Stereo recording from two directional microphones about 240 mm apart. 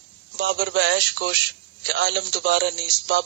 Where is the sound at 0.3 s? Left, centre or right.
Right.